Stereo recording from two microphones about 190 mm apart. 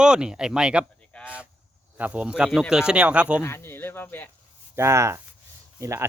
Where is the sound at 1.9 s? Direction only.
10° right (ahead or behind).